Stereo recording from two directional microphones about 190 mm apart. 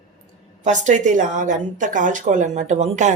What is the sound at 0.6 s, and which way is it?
A woman's voice, 40° right (ahead or behind).